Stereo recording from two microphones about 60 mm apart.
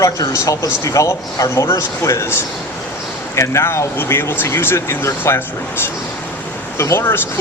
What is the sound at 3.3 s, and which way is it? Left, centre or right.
Speech, left.